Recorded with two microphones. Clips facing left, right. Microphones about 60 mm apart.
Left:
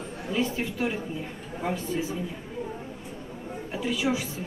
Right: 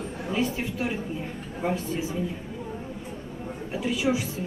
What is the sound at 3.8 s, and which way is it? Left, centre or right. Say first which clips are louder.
Speech: right 2 dB; centre.